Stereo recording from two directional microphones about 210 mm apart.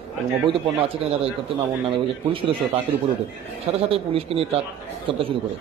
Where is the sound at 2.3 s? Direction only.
25° right (ahead or behind).